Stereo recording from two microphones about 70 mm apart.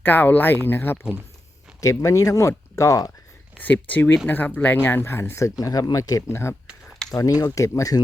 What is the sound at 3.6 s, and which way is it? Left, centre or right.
Speech, left.